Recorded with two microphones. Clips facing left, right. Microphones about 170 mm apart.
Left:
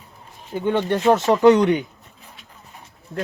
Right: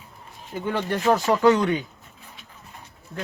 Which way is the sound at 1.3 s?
20° left (ahead or behind).